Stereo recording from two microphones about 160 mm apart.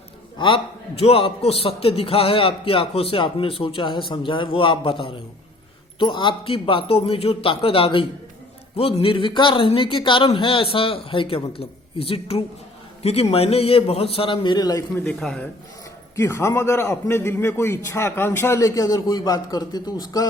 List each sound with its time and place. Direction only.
0.3 s speech: 35° left (ahead or behind); by 15.1 s 15° left (ahead or behind)
15.2 s speech: 5° left (ahead or behind)
16.1 s a man's voice: 15° left (ahead or behind)